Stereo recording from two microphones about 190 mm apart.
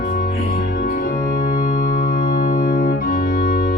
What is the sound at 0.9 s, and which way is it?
Organ, 50° left (ahead or behind).